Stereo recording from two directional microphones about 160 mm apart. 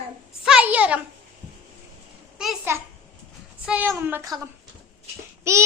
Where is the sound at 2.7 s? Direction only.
15° right (ahead or behind).